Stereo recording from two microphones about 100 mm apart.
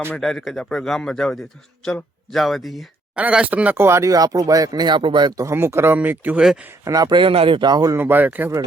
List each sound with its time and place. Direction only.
0.1 s a man's voice: 5° left (ahead or behind)
3.2 s speech: 15° right (ahead or behind); by 5.3 s 55° right (ahead or behind)
5.3 s speech: 30° right (ahead or behind)
6.8 s speech: 40° right (ahead or behind)
7.9 s speech: 20° right (ahead or behind)